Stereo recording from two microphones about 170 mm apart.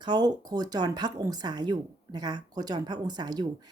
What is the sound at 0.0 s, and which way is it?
Speech, 25° right (ahead or behind).